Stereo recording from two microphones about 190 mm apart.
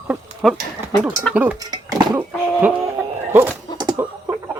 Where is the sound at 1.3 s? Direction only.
5° right (ahead or behind).